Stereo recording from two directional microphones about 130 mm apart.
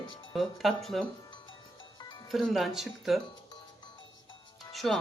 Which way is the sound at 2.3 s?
Centre (ahead or behind).